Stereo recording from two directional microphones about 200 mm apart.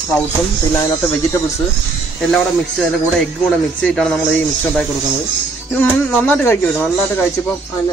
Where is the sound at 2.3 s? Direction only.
5° left (ahead or behind).